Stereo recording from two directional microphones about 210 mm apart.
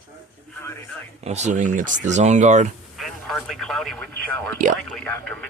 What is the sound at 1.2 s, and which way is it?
Speech, 30° right (ahead or behind).